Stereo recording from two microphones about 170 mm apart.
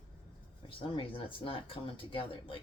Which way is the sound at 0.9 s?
30° left (ahead or behind).